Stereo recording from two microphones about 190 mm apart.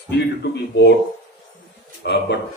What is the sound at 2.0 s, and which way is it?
Speech, 65° left (ahead or behind).